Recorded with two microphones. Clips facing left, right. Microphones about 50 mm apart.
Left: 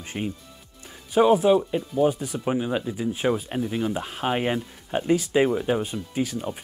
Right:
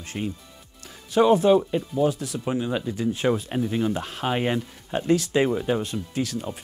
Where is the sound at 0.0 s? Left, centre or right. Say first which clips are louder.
Even; centre.